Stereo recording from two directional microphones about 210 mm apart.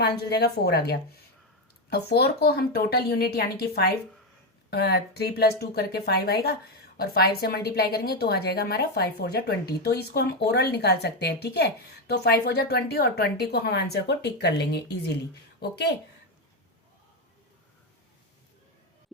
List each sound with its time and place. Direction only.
0.2 s speech: 50° left (ahead or behind)